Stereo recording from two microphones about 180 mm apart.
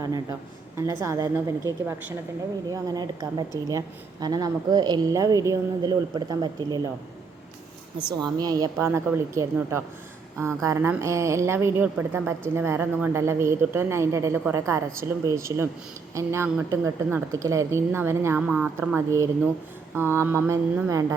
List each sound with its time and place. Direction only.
0.0 s a woman's voice: 20° right (ahead or behind)
2.6 s a woman's voice: 20° right (ahead or behind)
8.1 s a woman's voice: 20° right (ahead or behind)